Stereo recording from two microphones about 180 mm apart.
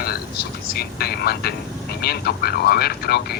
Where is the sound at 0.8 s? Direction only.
60° left (ahead or behind).